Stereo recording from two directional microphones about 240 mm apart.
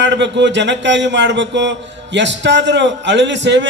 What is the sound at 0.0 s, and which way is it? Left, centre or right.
A man's voice, right.